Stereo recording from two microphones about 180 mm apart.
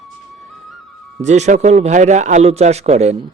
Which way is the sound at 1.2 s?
40° right (ahead or behind).